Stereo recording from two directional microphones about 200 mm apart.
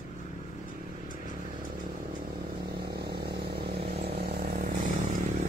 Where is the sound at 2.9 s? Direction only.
55° right (ahead or behind).